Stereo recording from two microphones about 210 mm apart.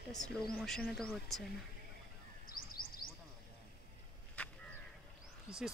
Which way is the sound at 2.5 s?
45° left (ahead or behind).